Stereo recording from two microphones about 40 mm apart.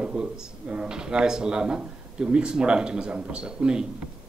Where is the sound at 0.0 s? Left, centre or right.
Right.